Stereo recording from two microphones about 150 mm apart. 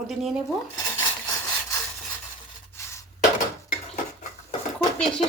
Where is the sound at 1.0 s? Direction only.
20° left (ahead or behind).